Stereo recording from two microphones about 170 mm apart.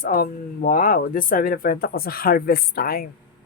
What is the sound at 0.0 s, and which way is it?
Speech, 55° left (ahead or behind).